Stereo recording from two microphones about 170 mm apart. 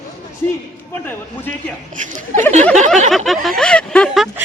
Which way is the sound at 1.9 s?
50° right (ahead or behind).